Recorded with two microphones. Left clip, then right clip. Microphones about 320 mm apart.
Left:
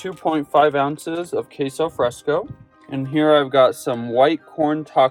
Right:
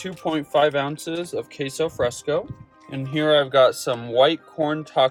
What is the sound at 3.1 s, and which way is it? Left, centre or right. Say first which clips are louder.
Speech: left 2 dB; centre.